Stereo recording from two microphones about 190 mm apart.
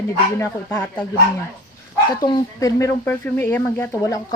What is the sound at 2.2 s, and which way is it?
Speech, 20° left (ahead or behind).